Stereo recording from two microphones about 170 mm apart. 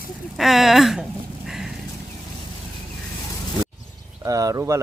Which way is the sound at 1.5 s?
5° right (ahead or behind).